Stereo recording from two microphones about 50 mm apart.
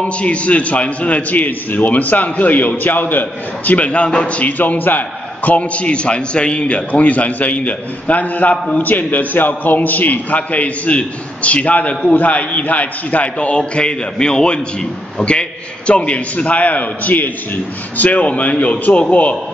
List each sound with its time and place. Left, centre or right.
0.0 s a man's voice: left